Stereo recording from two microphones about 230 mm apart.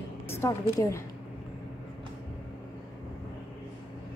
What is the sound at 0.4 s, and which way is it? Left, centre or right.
Speech, centre.